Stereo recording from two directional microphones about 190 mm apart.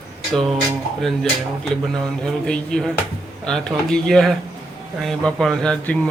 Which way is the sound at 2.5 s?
5° left (ahead or behind).